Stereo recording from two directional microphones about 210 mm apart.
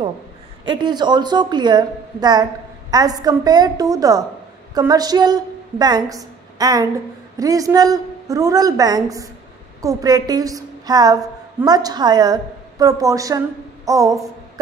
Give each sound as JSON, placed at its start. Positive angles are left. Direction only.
{"t": 0.7, "sound": "a woman's voice", "side_deg": -20}